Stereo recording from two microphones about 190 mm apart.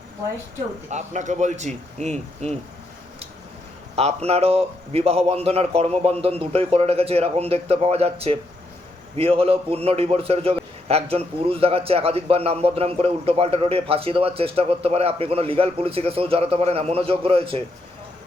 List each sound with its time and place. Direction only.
0.9 s a man's voice: 40° right (ahead or behind)
3.9 s a man's voice: 35° right (ahead or behind)